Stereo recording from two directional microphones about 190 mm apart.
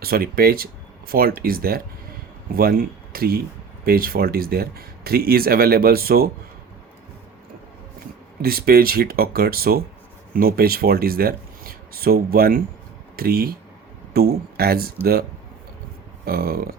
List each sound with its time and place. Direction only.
0.0 s speech: 50° right (ahead or behind)
8.4 s speech: 50° right (ahead or behind)
16.2 s speech: 55° right (ahead or behind)